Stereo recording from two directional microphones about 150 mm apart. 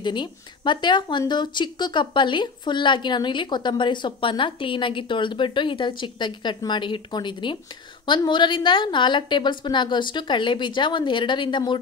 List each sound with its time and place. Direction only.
0.0 s speech: 30° left (ahead or behind)